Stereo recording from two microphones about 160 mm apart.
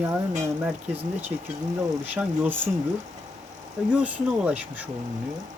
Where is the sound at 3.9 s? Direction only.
10° right (ahead or behind).